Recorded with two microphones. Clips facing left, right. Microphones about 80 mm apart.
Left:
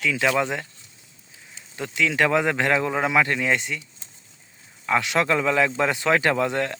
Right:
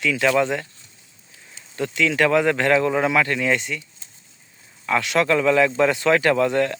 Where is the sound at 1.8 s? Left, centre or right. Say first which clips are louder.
Right 2 dB; centre.